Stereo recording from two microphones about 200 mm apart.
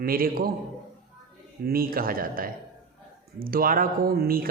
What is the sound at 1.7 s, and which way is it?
Speech, 45° right (ahead or behind).